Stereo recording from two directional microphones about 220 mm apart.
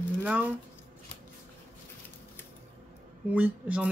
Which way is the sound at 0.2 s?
5° right (ahead or behind).